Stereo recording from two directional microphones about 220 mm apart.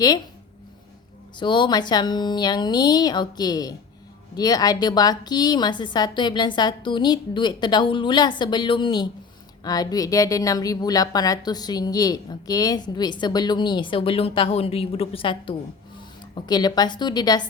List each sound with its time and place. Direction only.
1.4 s a woman's voice: 20° left (ahead or behind)